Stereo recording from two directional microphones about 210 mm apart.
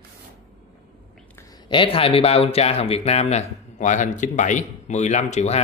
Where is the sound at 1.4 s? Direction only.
20° left (ahead or behind).